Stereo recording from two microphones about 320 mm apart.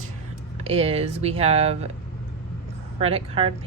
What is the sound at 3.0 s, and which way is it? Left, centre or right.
Speech, centre.